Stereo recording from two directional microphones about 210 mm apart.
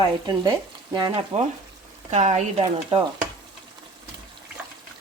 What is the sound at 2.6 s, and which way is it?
Speech, 20° right (ahead or behind).